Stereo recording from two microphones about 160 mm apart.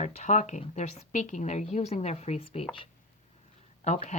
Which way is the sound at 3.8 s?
45° left (ahead or behind).